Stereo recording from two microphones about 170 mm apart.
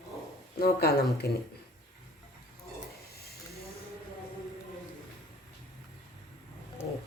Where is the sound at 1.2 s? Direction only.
65° left (ahead or behind).